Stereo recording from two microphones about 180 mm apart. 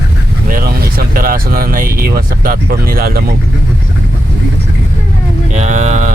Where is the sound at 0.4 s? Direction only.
55° right (ahead or behind).